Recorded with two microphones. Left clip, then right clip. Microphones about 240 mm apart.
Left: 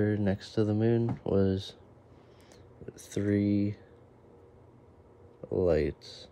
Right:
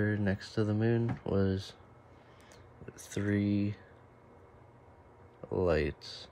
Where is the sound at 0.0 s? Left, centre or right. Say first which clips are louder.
Left 3 dB; centre.